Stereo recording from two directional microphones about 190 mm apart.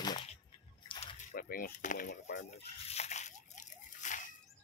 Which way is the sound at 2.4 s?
35° left (ahead or behind).